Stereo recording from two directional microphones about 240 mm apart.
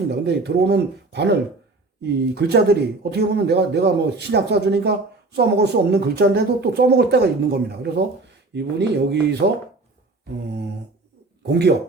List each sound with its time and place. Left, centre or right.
0.1 s speech: right
11.4 s speech: right